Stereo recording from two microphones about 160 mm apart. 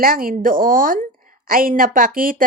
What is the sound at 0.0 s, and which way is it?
Speech, 65° right (ahead or behind).